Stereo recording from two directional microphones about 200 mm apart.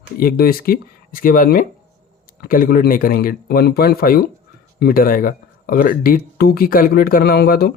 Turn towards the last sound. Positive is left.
turn(degrees=50)  # may be behind; listen again after turning